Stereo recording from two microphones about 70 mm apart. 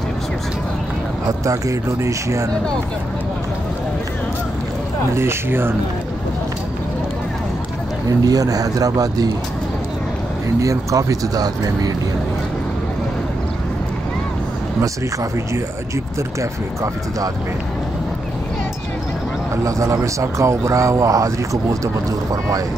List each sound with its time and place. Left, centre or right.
1.4 s a man's voice: right
5.1 s speech: right
8.1 s speech: right
10.6 s speech: right
16.3 s a man's voice: right
19.5 s a man's voice: right